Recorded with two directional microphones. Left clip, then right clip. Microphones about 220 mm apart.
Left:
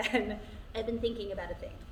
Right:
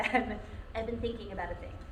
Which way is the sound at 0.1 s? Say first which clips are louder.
Right 1 dB; 30° left (ahead or behind).